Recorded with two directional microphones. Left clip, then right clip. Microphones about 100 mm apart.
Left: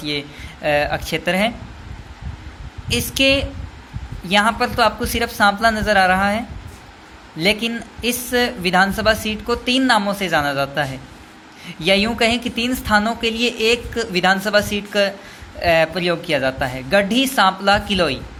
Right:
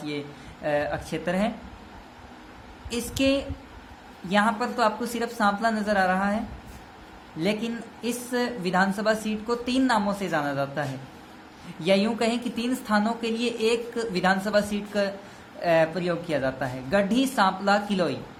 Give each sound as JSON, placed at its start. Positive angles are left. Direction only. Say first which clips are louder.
{"t": 0.0, "sound": "speech", "louder": "left 9 dB", "side_deg": 25}
{"t": 2.9, "sound": "speech", "louder": "left 9 dB", "side_deg": 20}